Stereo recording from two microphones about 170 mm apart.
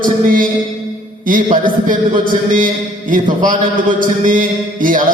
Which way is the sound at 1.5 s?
50° right (ahead or behind).